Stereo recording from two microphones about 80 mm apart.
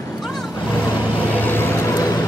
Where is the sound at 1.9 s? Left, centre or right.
Left.